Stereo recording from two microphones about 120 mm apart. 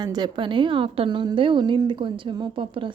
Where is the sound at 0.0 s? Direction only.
35° right (ahead or behind).